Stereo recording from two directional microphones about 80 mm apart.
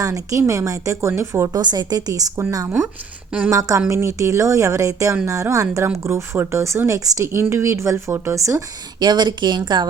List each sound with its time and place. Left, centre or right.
0.0 s speech: right
1.6 s a woman's voice: right
3.5 s speech: right
7.3 s speech: right
8.4 s speech: right
9.0 s speech: right